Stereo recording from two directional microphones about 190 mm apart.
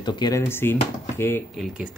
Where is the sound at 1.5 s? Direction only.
Centre (ahead or behind).